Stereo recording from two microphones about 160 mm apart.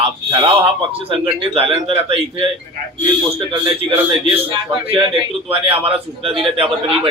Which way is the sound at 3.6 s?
35° right (ahead or behind).